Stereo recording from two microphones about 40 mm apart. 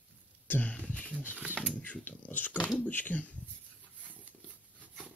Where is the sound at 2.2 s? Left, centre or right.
Left.